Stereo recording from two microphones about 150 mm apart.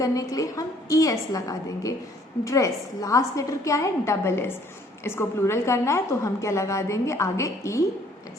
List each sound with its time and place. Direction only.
0.0 s a woman's voice: 25° left (ahead or behind)